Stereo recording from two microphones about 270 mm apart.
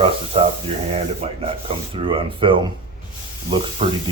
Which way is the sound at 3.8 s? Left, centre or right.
Right.